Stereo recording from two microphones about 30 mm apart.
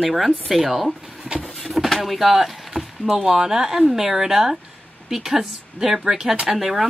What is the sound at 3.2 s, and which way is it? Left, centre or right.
Speech, right.